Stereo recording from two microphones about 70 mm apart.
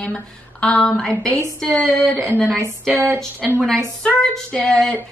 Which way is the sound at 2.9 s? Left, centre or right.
Right.